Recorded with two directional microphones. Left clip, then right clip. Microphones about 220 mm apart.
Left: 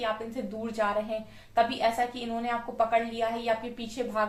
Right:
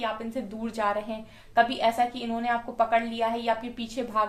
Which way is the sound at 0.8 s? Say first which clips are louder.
Right 1 dB; 50° right (ahead or behind).